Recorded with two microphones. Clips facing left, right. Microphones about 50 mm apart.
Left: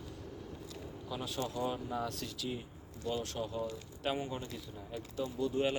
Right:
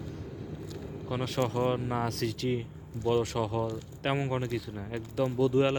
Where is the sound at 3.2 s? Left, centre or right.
Right.